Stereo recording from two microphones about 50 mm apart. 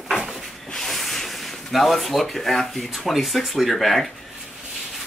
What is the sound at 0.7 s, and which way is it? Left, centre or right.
Speech, centre.